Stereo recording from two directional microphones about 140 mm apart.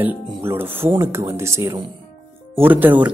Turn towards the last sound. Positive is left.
turn(degrees=-10)  # may be behind; listen again after turning